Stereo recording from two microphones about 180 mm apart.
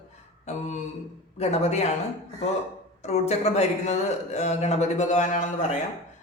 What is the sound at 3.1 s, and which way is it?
A man's voice, 35° left (ahead or behind).